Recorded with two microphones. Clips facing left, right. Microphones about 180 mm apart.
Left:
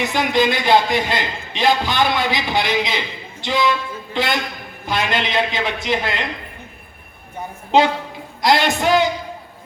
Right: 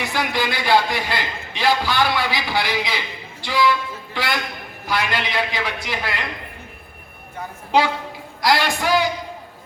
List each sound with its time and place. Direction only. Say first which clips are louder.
0.0 s a man's voice: left 5 dB; 20° left (ahead or behind)
7.7 s speech: left 3 dB; 20° left (ahead or behind)